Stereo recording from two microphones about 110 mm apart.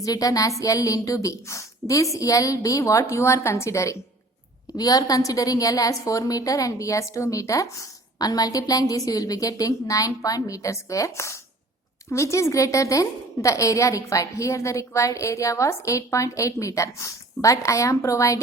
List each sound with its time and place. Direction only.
0.0 s a woman's voice: 35° left (ahead or behind)